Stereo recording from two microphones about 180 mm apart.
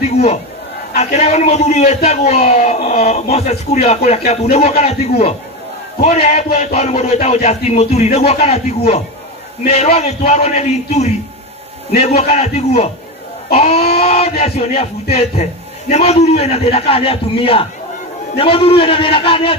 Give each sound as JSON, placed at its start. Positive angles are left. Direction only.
{"t": 0.9, "sound": "speech", "side_deg": 40}
{"t": 12.2, "sound": "speech", "side_deg": 35}
{"t": 15.9, "sound": "speech", "side_deg": 35}